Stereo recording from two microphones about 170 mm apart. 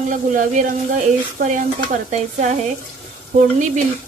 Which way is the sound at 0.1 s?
45° right (ahead or behind).